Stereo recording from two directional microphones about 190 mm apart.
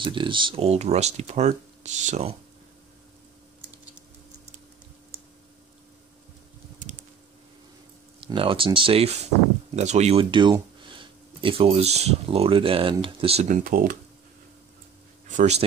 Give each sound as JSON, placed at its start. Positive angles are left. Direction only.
{"t": 0.0, "sound": "speech", "side_deg": -25}
{"t": 8.2, "sound": "speech", "side_deg": -25}
{"t": 15.2, "sound": "a man's voice", "side_deg": -40}